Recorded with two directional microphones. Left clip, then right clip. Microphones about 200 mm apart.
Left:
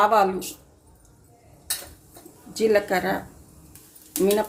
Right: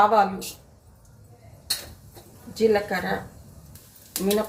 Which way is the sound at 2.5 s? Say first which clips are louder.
Left 1 dB; 55° left (ahead or behind).